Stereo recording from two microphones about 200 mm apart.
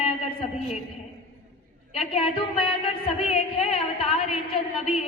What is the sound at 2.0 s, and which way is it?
A woman's voice, 30° left (ahead or behind).